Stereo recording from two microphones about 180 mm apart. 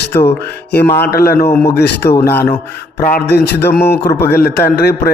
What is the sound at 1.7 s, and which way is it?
Speech, 65° left (ahead or behind).